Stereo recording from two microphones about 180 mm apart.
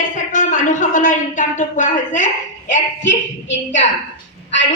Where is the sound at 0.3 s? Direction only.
45° left (ahead or behind).